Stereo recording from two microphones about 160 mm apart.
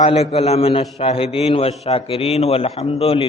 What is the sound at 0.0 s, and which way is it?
A man's voice, 35° left (ahead or behind).